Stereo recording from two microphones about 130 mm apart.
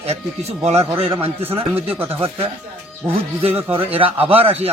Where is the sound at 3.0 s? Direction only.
50° right (ahead or behind).